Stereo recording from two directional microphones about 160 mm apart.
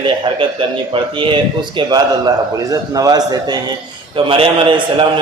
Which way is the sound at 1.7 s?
25° right (ahead or behind).